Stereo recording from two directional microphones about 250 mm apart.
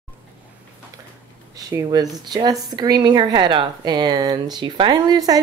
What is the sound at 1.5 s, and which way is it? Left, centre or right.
Speech, centre.